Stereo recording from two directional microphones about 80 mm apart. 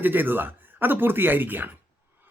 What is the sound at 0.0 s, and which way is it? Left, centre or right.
Speech, right.